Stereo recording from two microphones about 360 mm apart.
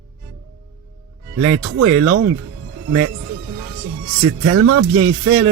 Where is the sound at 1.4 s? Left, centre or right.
Right.